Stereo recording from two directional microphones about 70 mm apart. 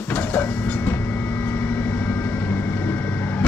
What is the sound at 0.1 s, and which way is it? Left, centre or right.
Vehicle, left.